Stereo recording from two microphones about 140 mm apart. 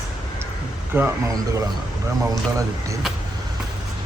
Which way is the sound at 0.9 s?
15° right (ahead or behind).